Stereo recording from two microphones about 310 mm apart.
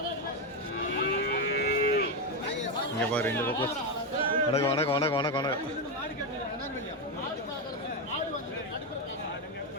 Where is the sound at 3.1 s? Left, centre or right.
Centre.